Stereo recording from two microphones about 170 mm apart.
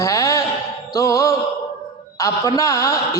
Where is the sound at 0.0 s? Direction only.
20° left (ahead or behind).